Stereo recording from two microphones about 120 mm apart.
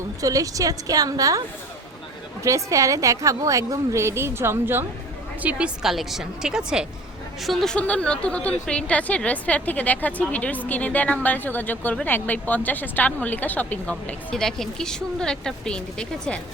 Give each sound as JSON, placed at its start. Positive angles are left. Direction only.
{"t": 0.2, "sound": "a woman's voice", "side_deg": -30}